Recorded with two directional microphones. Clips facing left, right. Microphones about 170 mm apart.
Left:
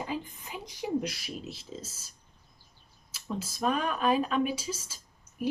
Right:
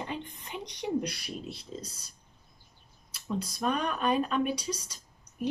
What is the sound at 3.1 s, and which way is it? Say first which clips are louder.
Speech: right 2 dB; 5° left (ahead or behind).